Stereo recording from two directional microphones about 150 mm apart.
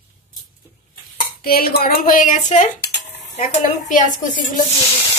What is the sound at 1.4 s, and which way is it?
A woman's voice, 85° left.